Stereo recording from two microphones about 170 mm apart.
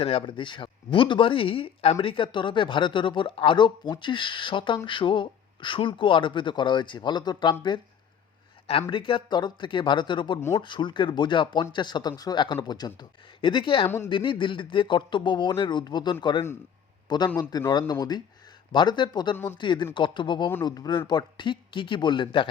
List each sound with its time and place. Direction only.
0.0 s speech: 35° left (ahead or behind)
8.9 s speech: 30° left (ahead or behind)